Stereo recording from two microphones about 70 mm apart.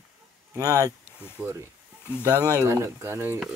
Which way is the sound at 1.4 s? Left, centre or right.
Right.